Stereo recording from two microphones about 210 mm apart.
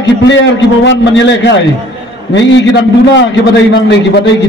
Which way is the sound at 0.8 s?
60° left (ahead or behind).